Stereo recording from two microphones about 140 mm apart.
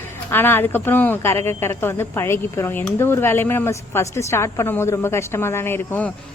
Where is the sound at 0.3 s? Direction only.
15° left (ahead or behind).